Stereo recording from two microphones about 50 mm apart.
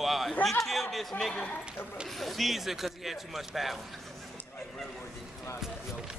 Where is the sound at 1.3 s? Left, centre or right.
Centre.